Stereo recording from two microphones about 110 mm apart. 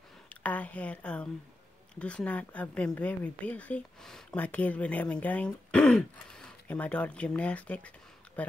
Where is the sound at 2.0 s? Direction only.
10° left (ahead or behind).